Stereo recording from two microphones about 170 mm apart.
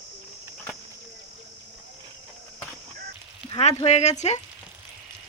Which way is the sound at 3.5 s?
35° left (ahead or behind).